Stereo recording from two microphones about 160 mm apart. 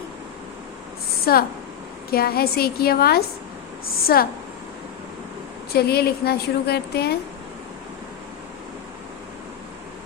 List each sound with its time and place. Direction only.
1.2 s a woman's voice: 70° left (ahead or behind)
5.7 s a woman's voice: 80° left